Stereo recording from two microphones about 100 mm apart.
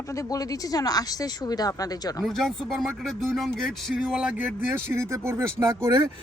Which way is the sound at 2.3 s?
5° left (ahead or behind).